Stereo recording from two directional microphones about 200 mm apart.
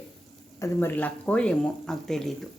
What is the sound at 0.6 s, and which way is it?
Speech, 10° left (ahead or behind).